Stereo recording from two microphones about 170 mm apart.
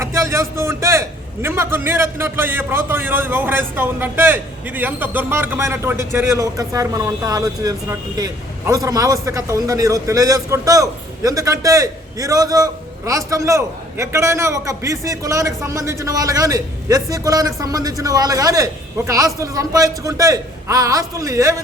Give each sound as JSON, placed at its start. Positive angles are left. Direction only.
{"t": 0.0, "sound": "a man's voice", "side_deg": -15}